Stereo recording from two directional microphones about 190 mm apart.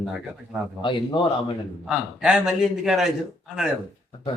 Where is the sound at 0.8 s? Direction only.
25° left (ahead or behind).